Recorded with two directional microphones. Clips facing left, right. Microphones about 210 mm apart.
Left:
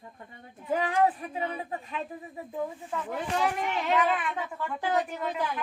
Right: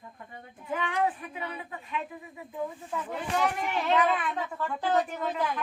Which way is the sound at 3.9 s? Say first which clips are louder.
Right 1 dB; 5° left (ahead or behind).